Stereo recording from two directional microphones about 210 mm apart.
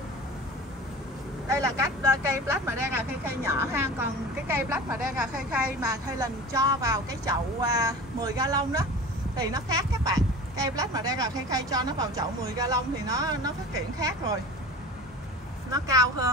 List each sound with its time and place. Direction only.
1.5 s speech: 15° right (ahead or behind)
5.9 s speech: 15° right (ahead or behind)
15.7 s speech: 15° right (ahead or behind)